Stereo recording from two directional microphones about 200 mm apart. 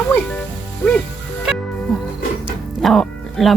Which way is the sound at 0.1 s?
5° left (ahead or behind).